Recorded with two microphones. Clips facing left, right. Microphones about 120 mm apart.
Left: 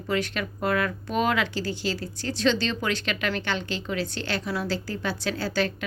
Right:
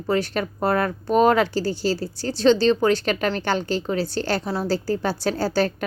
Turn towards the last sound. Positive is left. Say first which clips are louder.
# right 5 dB
turn(degrees=-40)  # may be behind; listen again after turning